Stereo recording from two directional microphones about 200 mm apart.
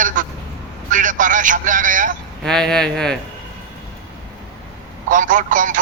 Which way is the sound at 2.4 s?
5° left (ahead or behind).